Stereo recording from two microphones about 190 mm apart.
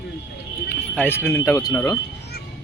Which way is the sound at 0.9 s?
10° left (ahead or behind).